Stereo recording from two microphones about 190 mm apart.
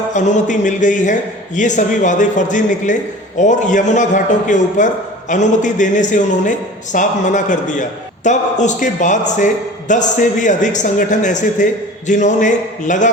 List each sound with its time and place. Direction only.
0.1 s a man's voice: 40° left (ahead or behind)